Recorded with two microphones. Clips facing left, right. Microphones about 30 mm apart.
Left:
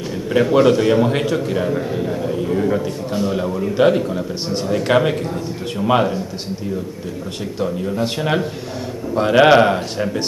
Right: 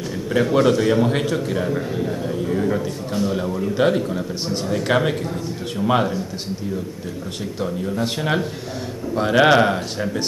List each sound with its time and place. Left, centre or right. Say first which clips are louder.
0.3 s a man's voice: left 3 dB; centre
7.6 s a man's voice: left 3 dB; centre